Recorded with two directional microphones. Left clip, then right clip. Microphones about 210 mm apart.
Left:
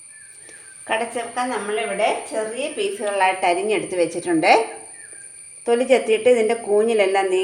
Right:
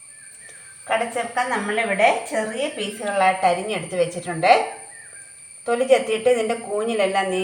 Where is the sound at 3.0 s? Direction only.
45° left (ahead or behind).